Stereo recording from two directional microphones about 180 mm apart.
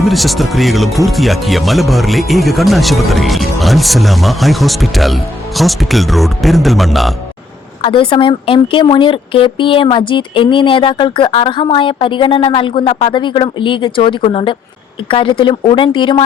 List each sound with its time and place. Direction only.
0.0 s speech: centre (ahead or behind)
7.8 s speech: 30° left (ahead or behind)